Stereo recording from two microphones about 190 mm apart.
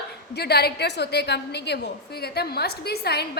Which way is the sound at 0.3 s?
60° left (ahead or behind).